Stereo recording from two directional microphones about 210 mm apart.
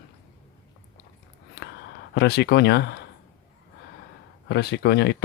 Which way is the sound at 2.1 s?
50° left (ahead or behind).